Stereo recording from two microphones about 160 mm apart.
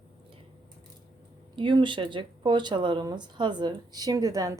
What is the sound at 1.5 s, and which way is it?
Speech, 30° right (ahead or behind).